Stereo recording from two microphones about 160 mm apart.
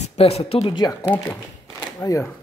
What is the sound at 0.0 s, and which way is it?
Speech, 40° left (ahead or behind).